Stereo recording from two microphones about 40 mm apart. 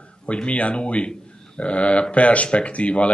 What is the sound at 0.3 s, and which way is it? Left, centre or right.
Speech, left.